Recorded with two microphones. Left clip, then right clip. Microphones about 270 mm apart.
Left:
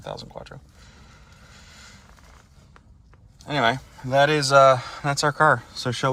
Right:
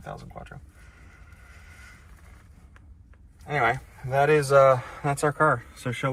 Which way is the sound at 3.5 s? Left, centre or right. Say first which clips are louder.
Left 2 dB; centre.